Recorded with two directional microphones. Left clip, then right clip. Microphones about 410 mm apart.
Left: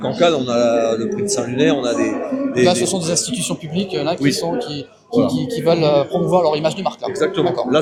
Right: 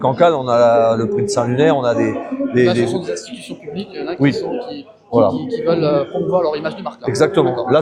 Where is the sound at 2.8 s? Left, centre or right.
Left.